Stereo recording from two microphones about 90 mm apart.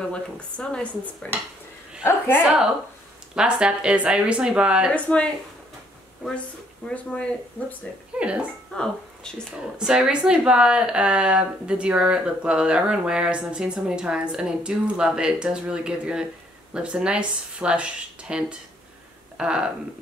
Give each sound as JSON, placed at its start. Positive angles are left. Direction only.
{"t": 0.1, "sound": "speech", "side_deg": 10}
{"t": 2.0, "sound": "a woman's voice", "side_deg": 25}
{"t": 3.3, "sound": "speech", "side_deg": -10}
{"t": 4.9, "sound": "speech", "side_deg": 15}
{"t": 6.9, "sound": "speech", "side_deg": 15}
{"t": 8.2, "sound": "speech", "side_deg": -15}
{"t": 8.7, "sound": "speech", "side_deg": 5}
{"t": 9.6, "sound": "speech", "side_deg": -10}